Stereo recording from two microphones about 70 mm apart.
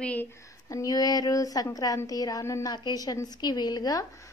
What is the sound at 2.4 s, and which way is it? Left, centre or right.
Speech, left.